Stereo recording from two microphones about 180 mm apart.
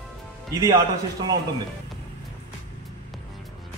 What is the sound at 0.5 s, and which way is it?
Speech, 20° right (ahead or behind).